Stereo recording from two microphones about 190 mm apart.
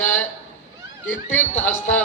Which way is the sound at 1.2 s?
10° left (ahead or behind).